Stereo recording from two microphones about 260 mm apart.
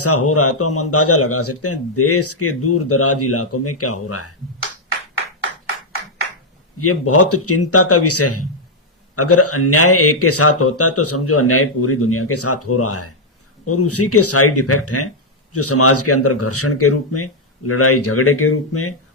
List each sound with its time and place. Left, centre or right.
0.0 s speech: left
6.7 s speech: left